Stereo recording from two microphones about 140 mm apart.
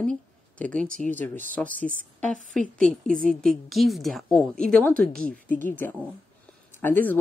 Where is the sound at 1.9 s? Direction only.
65° right (ahead or behind).